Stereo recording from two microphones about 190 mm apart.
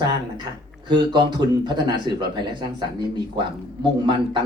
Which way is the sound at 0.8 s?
25° right (ahead or behind).